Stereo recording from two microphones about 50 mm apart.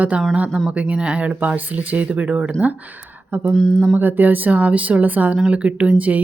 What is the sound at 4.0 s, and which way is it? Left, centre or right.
Speech, right.